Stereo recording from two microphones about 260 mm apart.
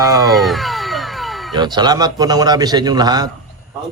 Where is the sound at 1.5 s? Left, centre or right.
Centre.